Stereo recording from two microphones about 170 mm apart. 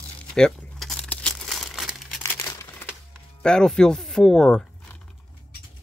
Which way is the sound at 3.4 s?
5° left (ahead or behind).